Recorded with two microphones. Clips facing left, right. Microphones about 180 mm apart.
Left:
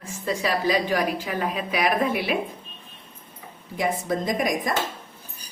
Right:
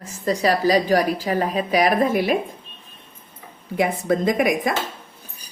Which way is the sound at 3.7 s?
60° right (ahead or behind).